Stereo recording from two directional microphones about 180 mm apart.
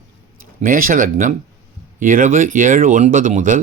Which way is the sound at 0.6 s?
50° right (ahead or behind).